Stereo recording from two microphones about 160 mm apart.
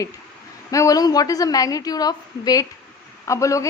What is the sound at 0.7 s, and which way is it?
A woman's voice, 20° left (ahead or behind).